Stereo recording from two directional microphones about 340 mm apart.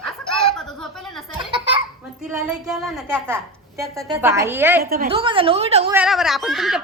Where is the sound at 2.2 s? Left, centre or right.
Centre.